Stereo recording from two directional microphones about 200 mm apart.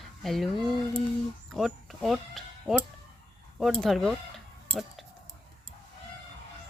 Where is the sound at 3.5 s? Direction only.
Centre (ahead or behind).